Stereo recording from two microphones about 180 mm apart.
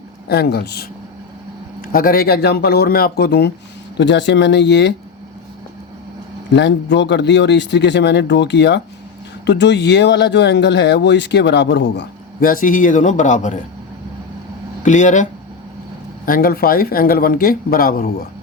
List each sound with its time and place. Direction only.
0.3 s speech: 60° left (ahead or behind)
1.9 s speech: 50° left (ahead or behind)
3.9 s speech: 80° left
6.5 s speech: 75° left (ahead or behind)
12.5 s speech: 50° left (ahead or behind)
14.8 s speech: 45° left (ahead or behind)